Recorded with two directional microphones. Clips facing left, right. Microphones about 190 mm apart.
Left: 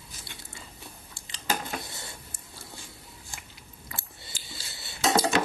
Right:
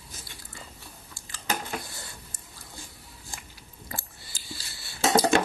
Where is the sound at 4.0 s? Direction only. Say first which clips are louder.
Even; 20° left (ahead or behind).